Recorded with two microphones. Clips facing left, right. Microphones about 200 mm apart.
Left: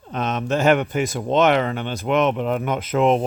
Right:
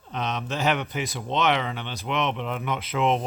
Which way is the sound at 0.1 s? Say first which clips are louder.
Left 7 dB; 50° left (ahead or behind).